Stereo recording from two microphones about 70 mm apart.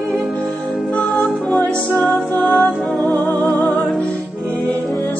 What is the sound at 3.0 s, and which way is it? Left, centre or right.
Music, left.